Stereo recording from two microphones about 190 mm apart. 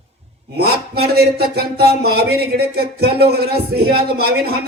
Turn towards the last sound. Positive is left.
turn(degrees=-55)  # may be behind; listen again after turning